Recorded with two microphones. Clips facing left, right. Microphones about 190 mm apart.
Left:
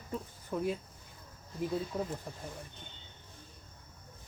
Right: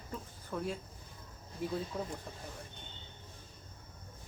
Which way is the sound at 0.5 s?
10° left (ahead or behind).